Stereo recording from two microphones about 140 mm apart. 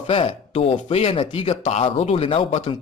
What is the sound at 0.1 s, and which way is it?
Speech, 45° left (ahead or behind).